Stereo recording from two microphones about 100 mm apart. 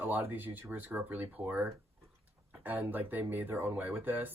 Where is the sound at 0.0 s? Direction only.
20° right (ahead or behind).